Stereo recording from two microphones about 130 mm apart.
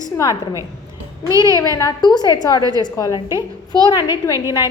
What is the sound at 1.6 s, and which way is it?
A woman's voice, 25° left (ahead or behind).